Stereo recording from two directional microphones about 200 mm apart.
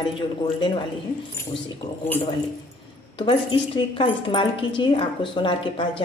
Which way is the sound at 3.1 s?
25° left (ahead or behind).